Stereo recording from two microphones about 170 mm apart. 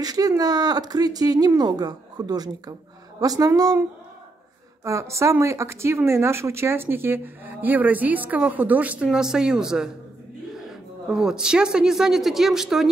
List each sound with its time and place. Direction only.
0.0 s speech: 20° right (ahead or behind)
4.8 s speech: 15° right (ahead or behind); by 12.8 s centre (ahead or behind)